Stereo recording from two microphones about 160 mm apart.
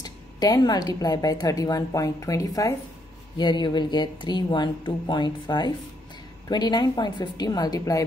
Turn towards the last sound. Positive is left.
turn(degrees=20)  # may be behind; listen again after turning